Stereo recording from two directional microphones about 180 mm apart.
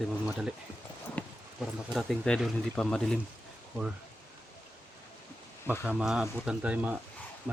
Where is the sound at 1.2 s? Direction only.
10° left (ahead or behind).